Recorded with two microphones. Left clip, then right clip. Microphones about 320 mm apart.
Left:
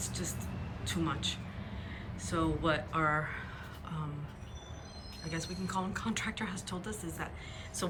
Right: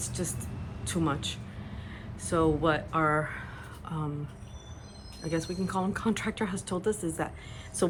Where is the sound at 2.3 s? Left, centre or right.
Centre.